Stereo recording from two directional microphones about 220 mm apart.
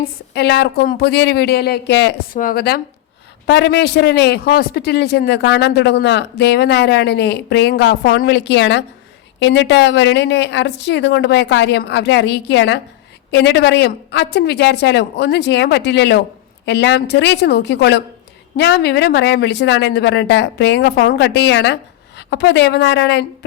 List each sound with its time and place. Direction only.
0.0 s a man's voice: 50° left (ahead or behind)
2.4 s a man's voice: 40° left (ahead or behind)